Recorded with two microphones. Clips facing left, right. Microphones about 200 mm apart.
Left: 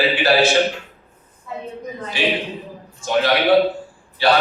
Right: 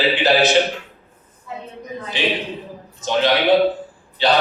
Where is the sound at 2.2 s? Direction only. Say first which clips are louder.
Left 1 dB; 20° right (ahead or behind).